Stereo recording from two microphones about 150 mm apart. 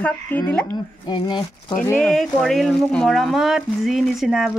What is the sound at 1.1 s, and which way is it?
Speech, 30° left (ahead or behind).